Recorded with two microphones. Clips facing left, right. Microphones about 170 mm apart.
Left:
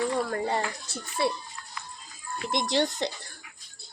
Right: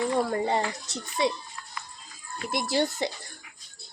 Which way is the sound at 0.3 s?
20° right (ahead or behind).